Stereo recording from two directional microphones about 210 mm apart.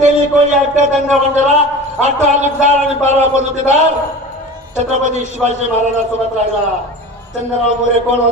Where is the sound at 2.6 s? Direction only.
35° right (ahead or behind).